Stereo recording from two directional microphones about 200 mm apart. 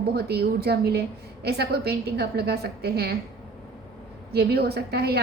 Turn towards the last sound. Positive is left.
turn(degrees=-55)  # may be behind; listen again after turning